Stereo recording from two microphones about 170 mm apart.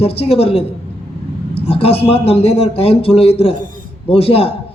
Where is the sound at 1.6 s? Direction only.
35° left (ahead or behind).